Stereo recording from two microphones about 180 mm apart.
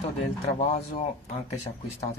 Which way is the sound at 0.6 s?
35° left (ahead or behind).